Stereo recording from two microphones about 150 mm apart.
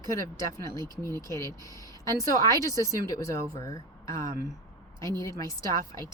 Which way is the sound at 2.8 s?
20° left (ahead or behind).